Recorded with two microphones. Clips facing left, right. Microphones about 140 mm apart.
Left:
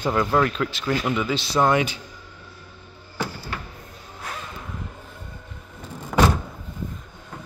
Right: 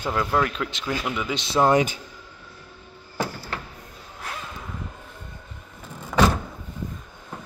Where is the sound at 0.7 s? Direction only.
15° right (ahead or behind).